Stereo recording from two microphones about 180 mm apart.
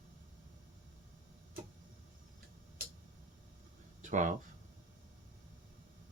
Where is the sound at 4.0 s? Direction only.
45° right (ahead or behind).